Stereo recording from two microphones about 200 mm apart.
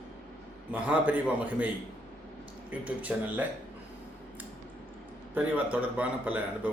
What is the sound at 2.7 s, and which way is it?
Speech, 5° right (ahead or behind).